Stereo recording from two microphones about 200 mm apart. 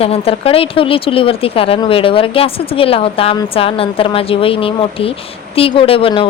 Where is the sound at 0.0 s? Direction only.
30° left (ahead or behind).